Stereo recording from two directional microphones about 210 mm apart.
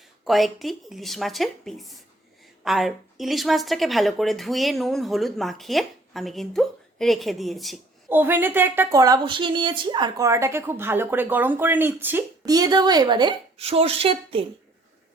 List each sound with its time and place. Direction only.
0.3 s a woman's voice: centre (ahead or behind); by 14.4 s 25° right (ahead or behind)